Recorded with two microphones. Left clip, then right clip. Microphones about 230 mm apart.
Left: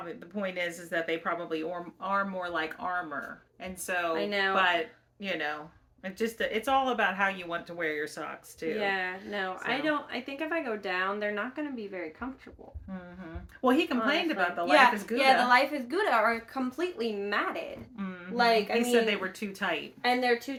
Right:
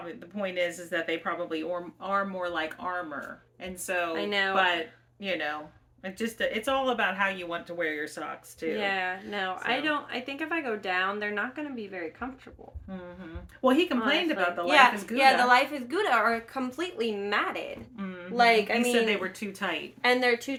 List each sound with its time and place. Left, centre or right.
0.1 s speech: centre
4.1 s speech: centre
4.5 s speech: centre
8.8 s speech: right
13.6 s speech: centre
14.7 s speech: centre
17.9 s speech: centre
18.3 s speech: right
19.0 s speech: centre
20.0 s speech: right